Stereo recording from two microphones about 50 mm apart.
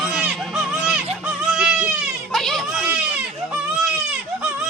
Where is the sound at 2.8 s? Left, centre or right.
Right.